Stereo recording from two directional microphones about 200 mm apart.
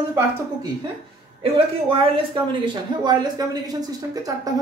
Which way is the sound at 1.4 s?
25° right (ahead or behind).